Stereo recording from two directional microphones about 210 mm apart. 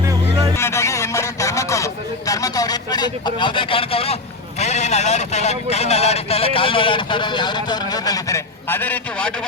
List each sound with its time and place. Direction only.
0.0 s music: 15° right (ahead or behind)
0.5 s a sound: 15° left (ahead or behind); by 4.2 s 30° left (ahead or behind)
4.6 s speech: 30° left (ahead or behind); by 9.3 s 5° left (ahead or behind)